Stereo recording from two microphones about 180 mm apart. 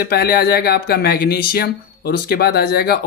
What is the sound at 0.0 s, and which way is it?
Speech, 60° left (ahead or behind).